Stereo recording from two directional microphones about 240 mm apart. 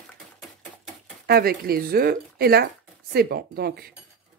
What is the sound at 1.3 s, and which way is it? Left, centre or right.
Speech, right.